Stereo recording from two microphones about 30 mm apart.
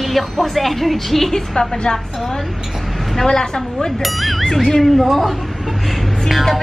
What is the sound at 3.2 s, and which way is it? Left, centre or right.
Speech, left.